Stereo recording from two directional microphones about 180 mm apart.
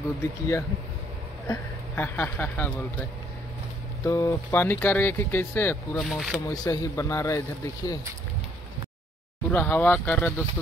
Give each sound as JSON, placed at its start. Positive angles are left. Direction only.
{"t": 0.2, "sound": "speech", "side_deg": 15}
{"t": 5.9, "sound": "speech", "side_deg": 0}
{"t": 6.5, "sound": "a man's voice", "side_deg": 20}
{"t": 9.5, "sound": "speech", "side_deg": 10}